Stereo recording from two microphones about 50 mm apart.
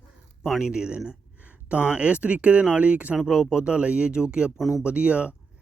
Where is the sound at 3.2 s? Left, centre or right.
Centre.